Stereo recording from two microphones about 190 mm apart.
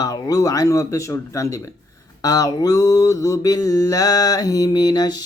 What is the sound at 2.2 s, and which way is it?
Mantra, 20° left (ahead or behind).